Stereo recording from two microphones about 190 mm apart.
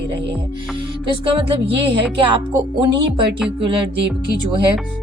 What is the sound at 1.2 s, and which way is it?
Music, 30° right (ahead or behind).